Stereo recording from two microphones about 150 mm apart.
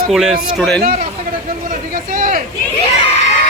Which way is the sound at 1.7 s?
70° right (ahead or behind).